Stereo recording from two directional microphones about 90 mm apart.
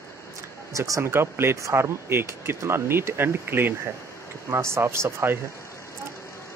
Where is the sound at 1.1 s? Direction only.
25° right (ahead or behind).